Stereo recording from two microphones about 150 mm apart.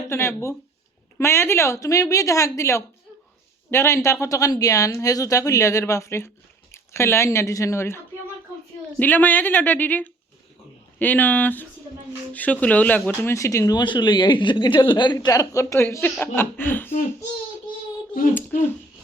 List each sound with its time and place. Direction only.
0.1 s a woman's voice: 15° left (ahead or behind)
13.2 s a woman's voice: 20° left (ahead or behind)